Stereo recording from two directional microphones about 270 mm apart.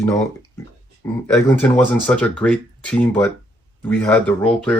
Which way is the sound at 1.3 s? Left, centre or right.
Centre.